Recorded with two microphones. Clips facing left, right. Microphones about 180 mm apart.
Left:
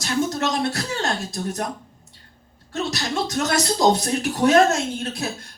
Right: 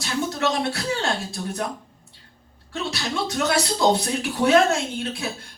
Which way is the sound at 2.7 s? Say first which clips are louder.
Left 2 dB; 40° left (ahead or behind).